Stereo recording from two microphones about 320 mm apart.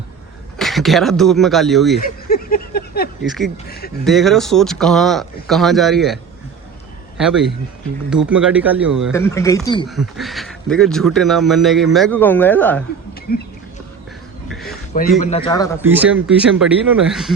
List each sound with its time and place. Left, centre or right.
0.6 s speech: centre
2.0 s a sound: left
3.2 s a man's voice: centre
3.7 s speech: left
4.0 s a man's voice: centre
7.2 s a man's voice: centre
9.1 s speech: centre
9.9 s a man's voice: centre
13.3 s speech: left
14.7 s a sound: left
15.2 s speech: centre
15.8 s a man's voice: centre